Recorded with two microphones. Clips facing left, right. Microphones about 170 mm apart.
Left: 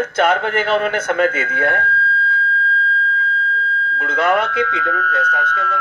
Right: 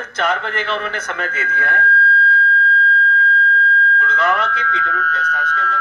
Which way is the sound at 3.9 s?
55° left (ahead or behind).